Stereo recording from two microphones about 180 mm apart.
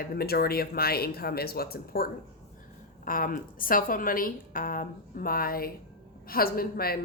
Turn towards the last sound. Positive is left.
turn(degrees=60)  # may be behind; listen again after turning